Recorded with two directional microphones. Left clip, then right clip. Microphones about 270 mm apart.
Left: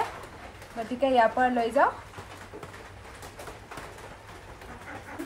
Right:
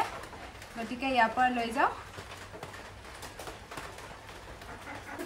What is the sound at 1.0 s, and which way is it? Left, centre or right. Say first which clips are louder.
Speech: left 4 dB; centre.